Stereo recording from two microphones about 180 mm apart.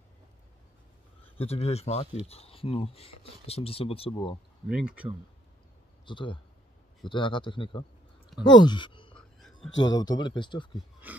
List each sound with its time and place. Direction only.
1.4 s speech: 35° left (ahead or behind)
4.6 s speech: 5° right (ahead or behind)
6.0 s speech: 25° left (ahead or behind)
9.1 s whispering: centre (ahead or behind)
9.8 s speech: 20° left (ahead or behind)
11.0 s a sound: 10° right (ahead or behind)